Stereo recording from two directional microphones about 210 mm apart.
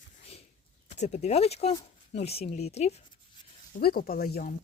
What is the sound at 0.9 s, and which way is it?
Speech, 35° left (ahead or behind).